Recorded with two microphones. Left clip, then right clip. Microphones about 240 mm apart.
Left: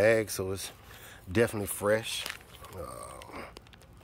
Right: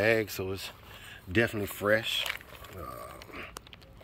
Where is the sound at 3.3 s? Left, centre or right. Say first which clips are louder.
Even; centre.